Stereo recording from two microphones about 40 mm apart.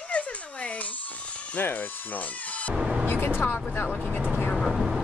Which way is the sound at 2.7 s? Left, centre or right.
Centre.